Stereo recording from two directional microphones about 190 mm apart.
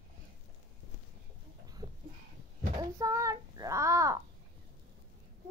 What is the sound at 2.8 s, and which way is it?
Child singing, 15° right (ahead or behind).